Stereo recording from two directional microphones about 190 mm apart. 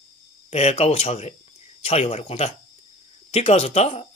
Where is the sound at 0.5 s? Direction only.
35° left (ahead or behind).